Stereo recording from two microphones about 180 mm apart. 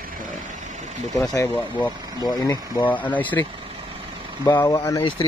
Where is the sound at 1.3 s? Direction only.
15° left (ahead or behind).